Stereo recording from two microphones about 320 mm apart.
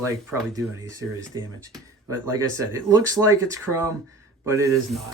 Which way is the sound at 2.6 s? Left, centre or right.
Centre.